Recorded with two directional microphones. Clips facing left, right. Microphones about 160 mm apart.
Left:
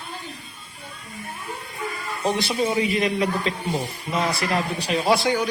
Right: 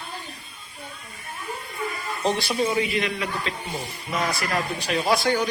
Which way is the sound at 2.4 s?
25° left (ahead or behind).